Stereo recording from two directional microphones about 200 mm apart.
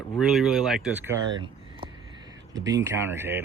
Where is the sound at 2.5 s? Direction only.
20° right (ahead or behind).